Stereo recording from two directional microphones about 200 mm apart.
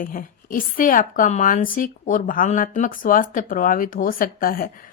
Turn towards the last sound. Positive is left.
turn(degrees=45)  # may be behind; listen again after turning